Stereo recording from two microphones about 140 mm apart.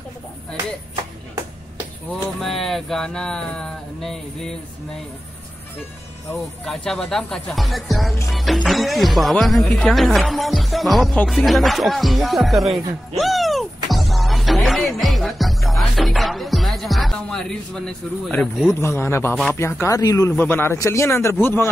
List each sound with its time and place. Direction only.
2.4 s speech: centre (ahead or behind)
6.3 s speech: 5° left (ahead or behind)
18.8 s a man's voice: 20° left (ahead or behind)
20.3 s a man's voice: 15° left (ahead or behind)